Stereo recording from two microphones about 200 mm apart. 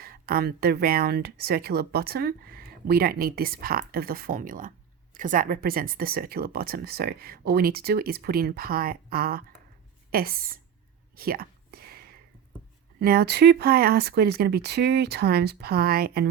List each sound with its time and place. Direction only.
0.0 s speech: 45° right (ahead or behind)
11.1 s whispering: 45° right (ahead or behind)
13.0 s speech: 55° right (ahead or behind)